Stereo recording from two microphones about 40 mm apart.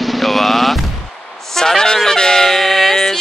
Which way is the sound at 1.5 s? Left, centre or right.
Centre.